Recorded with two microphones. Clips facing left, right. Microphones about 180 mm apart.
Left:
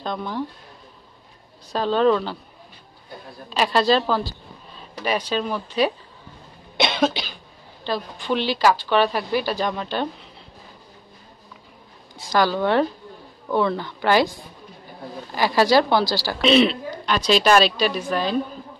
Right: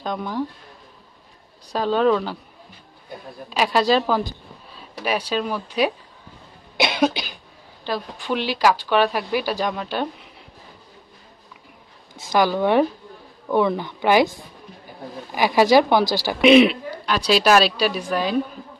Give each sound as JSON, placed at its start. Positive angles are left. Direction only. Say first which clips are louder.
{"t": 0.0, "sound": "a woman's voice", "louder": "right 1 dB", "side_deg": -10}
{"t": 1.7, "sound": "a woman's voice", "louder": "even", "side_deg": -10}
{"t": 3.4, "sound": "a woman's voice", "louder": "even", "side_deg": -10}
{"t": 6.8, "sound": "cough", "louder": "right 1 dB", "side_deg": -5}
{"t": 7.8, "sound": "a woman's voice", "louder": "even", "side_deg": -10}
{"t": 12.2, "sound": "a woman's voice", "louder": "right 1 dB", "side_deg": -20}
{"t": 15.3, "sound": "a woman's voice", "louder": "right 2 dB", "side_deg": -15}